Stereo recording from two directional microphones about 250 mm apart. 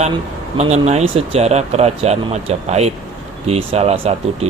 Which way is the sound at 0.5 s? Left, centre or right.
Right.